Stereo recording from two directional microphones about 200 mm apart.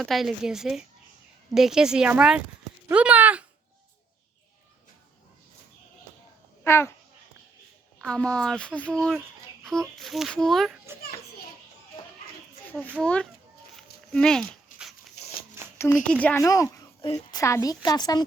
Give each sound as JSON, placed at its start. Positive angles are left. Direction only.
{"t": 0.0, "sound": "speech", "side_deg": 0}
{"t": 6.7, "sound": "a woman's voice", "side_deg": 15}
{"t": 7.9, "sound": "speech", "side_deg": 5}
{"t": 13.0, "sound": "speech", "side_deg": 5}
{"t": 14.7, "sound": "dog", "side_deg": 45}
{"t": 15.6, "sound": "a sound", "side_deg": -15}
{"t": 16.2, "sound": "a woman's voice", "side_deg": 15}